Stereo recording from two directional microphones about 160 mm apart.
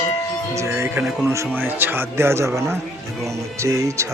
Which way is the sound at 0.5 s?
20° right (ahead or behind).